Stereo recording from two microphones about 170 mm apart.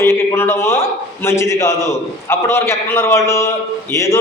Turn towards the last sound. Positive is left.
turn(degrees=15)  # may be behind; listen again after turning